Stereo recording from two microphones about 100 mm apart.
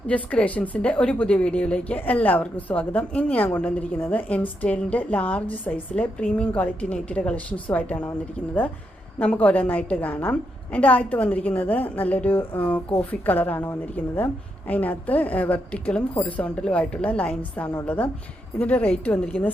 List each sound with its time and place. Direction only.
0.1 s a woman's voice: 15° left (ahead or behind)
9.1 s a woman's voice: 15° left (ahead or behind)